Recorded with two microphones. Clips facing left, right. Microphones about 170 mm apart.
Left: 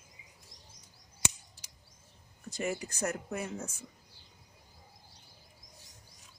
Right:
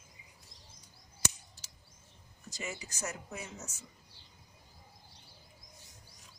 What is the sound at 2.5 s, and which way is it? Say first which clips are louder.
Speech: left 8 dB; 55° left (ahead or behind).